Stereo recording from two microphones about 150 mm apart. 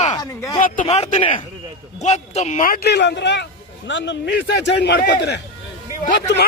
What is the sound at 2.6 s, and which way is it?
Speech, 80° left.